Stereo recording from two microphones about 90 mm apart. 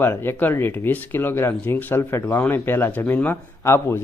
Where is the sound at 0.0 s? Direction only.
25° left (ahead or behind).